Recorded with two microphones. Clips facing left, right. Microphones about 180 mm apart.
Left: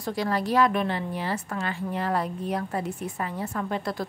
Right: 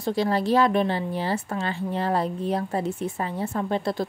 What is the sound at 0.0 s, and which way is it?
A woman's voice, 25° right (ahead or behind).